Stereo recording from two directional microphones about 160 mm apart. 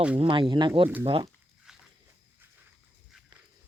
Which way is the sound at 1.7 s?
5° right (ahead or behind).